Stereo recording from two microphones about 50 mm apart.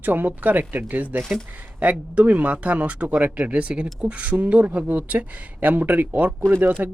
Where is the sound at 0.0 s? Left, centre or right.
Right.